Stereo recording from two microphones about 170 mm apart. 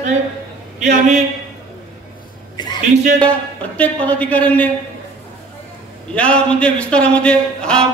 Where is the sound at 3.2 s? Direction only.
10° left (ahead or behind).